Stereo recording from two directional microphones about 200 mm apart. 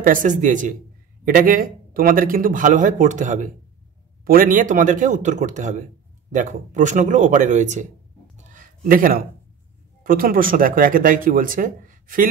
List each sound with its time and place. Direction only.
0.0 s speech: 40° right (ahead or behind)
8.4 s a sound: 40° right (ahead or behind)
10.0 s speech: 45° right (ahead or behind)